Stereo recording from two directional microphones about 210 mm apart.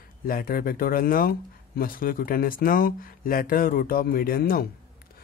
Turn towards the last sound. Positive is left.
turn(degrees=45)  # may be behind; listen again after turning